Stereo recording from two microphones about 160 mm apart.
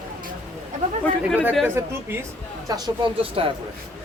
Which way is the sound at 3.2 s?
35° right (ahead or behind).